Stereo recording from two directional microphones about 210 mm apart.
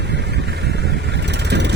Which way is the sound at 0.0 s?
55° right (ahead or behind).